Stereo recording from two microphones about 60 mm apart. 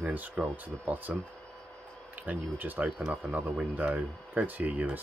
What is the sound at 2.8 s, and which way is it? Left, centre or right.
Speech, centre.